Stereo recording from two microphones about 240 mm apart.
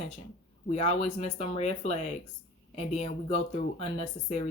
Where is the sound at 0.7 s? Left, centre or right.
Left.